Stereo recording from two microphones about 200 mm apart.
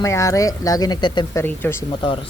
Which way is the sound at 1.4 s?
10° left (ahead or behind).